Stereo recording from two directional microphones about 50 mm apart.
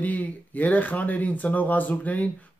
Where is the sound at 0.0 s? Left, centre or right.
Left.